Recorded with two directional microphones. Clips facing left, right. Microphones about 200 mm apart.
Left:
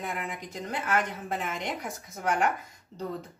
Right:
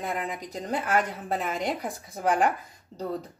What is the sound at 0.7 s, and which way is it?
A woman's voice, 35° right (ahead or behind).